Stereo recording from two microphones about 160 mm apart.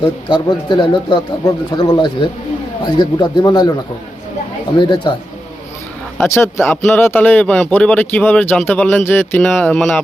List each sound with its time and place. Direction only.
0.3 s speech: 30° left (ahead or behind)
4.8 s speech: 30° left (ahead or behind)
6.1 s a man's voice: 15° left (ahead or behind)